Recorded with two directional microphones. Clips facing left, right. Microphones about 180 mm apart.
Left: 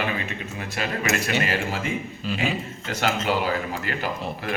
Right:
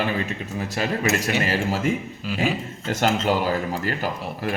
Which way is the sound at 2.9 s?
45° right (ahead or behind).